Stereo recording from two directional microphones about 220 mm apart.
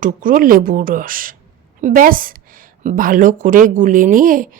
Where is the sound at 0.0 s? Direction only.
35° right (ahead or behind).